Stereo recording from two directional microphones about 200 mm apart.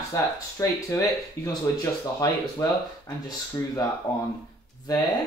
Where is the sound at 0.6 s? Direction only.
15° left (ahead or behind).